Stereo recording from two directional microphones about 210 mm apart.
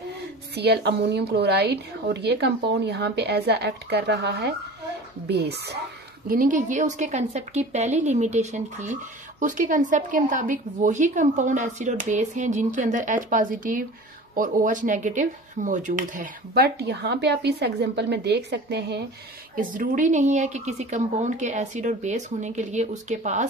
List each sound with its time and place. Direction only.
0.6 s speech: 50° right (ahead or behind)
6.2 s a woman's voice: 40° right (ahead or behind)
19.5 s a woman's voice: 40° right (ahead or behind)